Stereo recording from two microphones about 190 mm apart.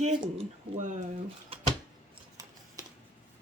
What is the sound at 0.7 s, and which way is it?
Speech, 40° right (ahead or behind).